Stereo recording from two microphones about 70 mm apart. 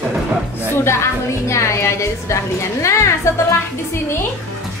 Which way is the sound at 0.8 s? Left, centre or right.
Left.